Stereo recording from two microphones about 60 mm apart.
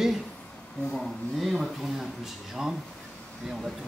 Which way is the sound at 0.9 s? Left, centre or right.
Centre.